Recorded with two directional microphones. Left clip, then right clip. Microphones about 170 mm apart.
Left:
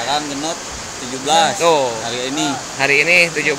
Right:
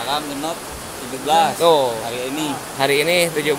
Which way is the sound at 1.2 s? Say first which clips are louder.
Left 2 dB; 35° left (ahead or behind).